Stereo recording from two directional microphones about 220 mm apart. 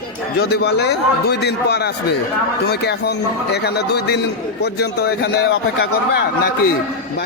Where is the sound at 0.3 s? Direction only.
50° left (ahead or behind).